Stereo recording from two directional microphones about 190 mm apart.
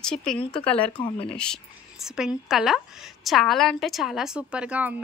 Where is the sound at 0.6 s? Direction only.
5° left (ahead or behind).